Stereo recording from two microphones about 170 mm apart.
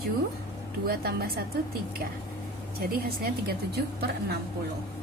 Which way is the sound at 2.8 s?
60° right (ahead or behind).